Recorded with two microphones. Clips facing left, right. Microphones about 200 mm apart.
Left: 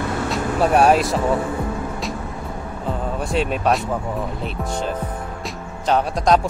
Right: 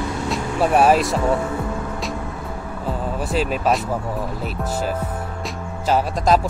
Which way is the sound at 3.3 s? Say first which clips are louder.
Even; centre (ahead or behind).